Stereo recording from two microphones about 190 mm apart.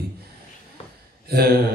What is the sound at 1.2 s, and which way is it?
Speech, 55° right (ahead or behind).